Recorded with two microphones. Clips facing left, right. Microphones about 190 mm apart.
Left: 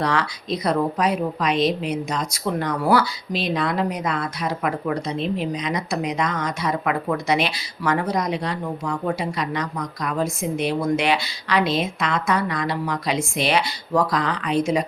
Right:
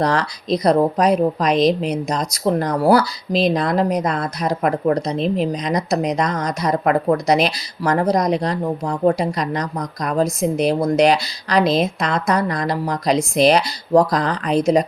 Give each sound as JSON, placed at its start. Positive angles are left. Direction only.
{"t": 0.0, "sound": "speech", "side_deg": -40}